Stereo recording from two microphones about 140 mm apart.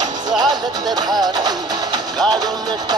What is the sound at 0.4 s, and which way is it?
Music, 30° right (ahead or behind).